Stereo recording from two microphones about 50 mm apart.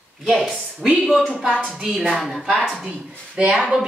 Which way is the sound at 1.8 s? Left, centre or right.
Centre.